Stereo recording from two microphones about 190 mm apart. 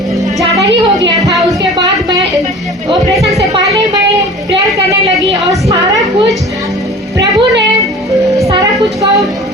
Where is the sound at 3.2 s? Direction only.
Centre (ahead or behind).